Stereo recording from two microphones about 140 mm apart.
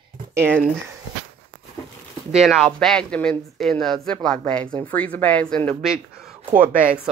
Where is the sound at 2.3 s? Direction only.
Centre (ahead or behind).